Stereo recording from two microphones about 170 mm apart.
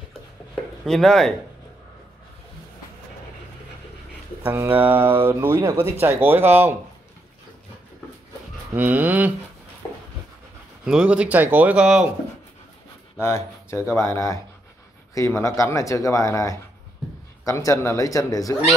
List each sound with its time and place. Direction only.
0.8 s speech: centre (ahead or behind)
4.5 s speech: 10° right (ahead or behind)
8.7 s speech: 10° right (ahead or behind)
10.9 s speech: 5° right (ahead or behind)
13.2 s speech: 15° left (ahead or behind)